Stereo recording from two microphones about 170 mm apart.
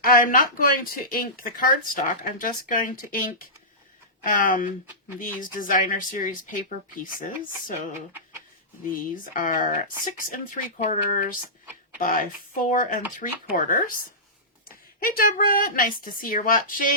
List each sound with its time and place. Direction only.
0.0 s speech: 55° left (ahead or behind)
8.9 s speech: 50° left (ahead or behind)